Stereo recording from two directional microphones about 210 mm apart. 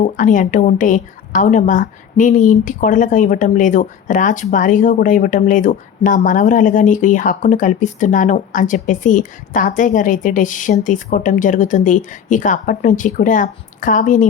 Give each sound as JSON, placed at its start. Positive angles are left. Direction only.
{"t": 0.0, "sound": "a woman's voice", "side_deg": 40}